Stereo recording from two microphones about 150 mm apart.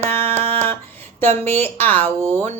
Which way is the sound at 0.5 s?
15° left (ahead or behind).